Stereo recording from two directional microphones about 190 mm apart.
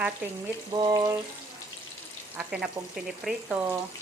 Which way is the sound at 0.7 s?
20° right (ahead or behind).